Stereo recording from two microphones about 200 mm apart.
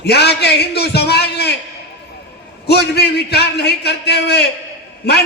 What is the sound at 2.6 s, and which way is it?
A man's voice, 55° left (ahead or behind).